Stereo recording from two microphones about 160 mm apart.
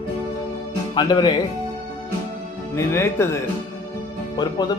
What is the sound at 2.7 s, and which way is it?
Speech, 15° left (ahead or behind).